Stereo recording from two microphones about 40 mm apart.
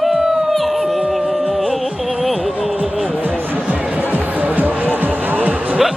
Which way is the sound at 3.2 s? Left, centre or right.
Right.